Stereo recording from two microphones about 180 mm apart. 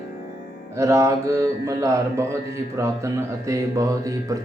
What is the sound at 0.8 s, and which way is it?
Mantra, 15° right (ahead or behind).